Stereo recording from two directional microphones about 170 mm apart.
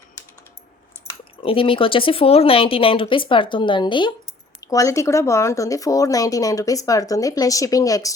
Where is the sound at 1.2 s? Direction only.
30° left (ahead or behind).